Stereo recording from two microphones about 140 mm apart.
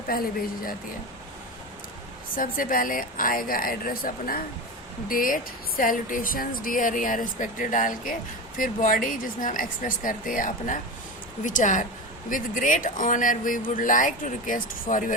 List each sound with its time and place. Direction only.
0.1 s speech: 90° left
2.3 s speech: 75° left (ahead or behind)